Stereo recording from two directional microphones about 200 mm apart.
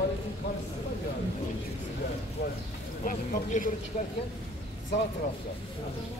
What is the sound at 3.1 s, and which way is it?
Speech, 45° left (ahead or behind).